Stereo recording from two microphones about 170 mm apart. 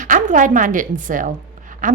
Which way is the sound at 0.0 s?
50° right (ahead or behind).